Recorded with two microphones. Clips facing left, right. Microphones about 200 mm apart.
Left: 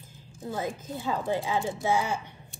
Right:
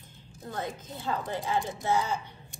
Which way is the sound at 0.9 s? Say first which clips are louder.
Left 4 dB; 10° left (ahead or behind).